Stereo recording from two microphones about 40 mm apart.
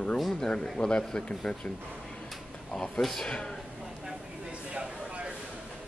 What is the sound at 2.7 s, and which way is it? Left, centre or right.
Speech, centre.